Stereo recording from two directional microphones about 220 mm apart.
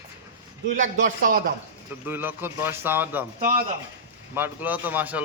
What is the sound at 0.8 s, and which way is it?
Speech, 35° right (ahead or behind).